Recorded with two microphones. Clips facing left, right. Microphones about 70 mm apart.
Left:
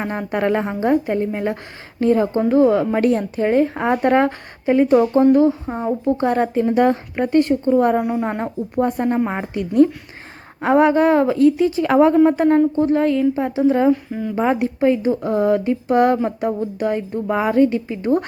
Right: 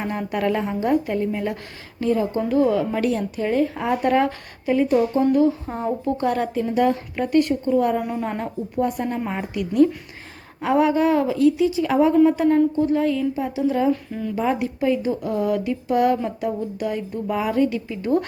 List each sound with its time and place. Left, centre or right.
0.0 s a woman's voice: left
5.2 s a woman's voice: left
5.6 s a woman's voice: left
12.1 s a woman's voice: left
13.9 s speech: centre
14.3 s a woman's voice: left